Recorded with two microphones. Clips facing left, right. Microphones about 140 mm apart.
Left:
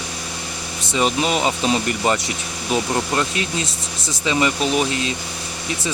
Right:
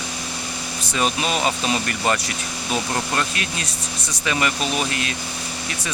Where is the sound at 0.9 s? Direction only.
20° left (ahead or behind).